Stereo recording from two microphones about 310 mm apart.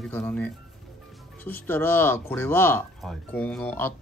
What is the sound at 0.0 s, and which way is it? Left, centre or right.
Speech, centre.